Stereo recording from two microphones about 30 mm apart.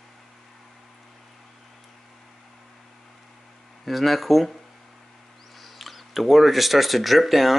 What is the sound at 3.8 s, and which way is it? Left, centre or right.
Speech, centre.